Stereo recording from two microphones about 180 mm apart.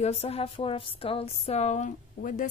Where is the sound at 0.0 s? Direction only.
35° left (ahead or behind).